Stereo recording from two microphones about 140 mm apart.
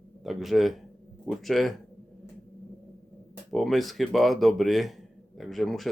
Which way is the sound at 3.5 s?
Centre (ahead or behind).